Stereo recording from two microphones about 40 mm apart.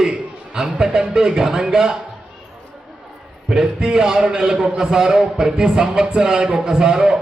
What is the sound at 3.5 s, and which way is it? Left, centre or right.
A man's voice, centre.